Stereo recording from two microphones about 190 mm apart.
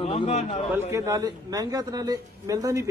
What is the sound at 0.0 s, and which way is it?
Speech, 35° left (ahead or behind).